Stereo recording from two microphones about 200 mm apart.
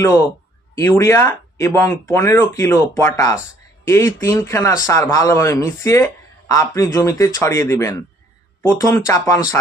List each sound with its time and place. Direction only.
0.0 s speech: 15° left (ahead or behind)